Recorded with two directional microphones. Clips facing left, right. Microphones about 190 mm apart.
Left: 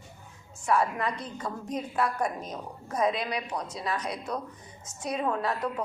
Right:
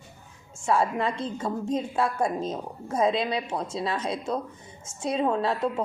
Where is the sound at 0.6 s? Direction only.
25° right (ahead or behind).